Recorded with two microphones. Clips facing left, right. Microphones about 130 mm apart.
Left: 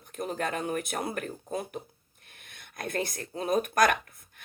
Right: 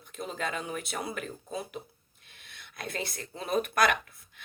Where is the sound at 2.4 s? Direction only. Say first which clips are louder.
Left 3 dB; 50° left (ahead or behind).